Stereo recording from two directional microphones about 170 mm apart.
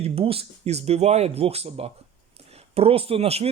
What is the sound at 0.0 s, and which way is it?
Speech, 35° right (ahead or behind).